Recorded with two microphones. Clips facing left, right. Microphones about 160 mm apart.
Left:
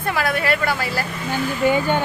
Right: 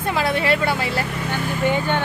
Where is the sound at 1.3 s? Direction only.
10° left (ahead or behind).